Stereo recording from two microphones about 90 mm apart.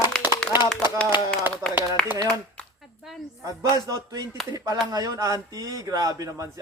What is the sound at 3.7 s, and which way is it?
Speech, 40° right (ahead or behind).